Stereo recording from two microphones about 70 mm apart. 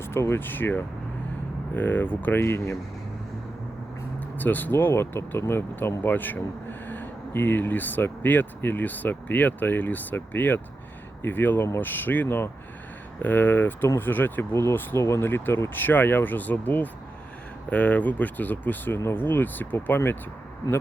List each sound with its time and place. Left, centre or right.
0.0 s speech: left
4.4 s speech: left